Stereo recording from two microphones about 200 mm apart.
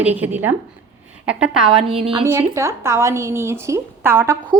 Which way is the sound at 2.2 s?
15° right (ahead or behind).